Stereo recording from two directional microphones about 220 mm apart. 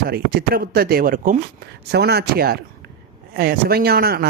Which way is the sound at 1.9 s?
50° right (ahead or behind).